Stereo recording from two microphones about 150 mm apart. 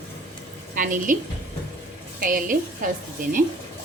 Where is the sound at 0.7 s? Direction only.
60° right (ahead or behind).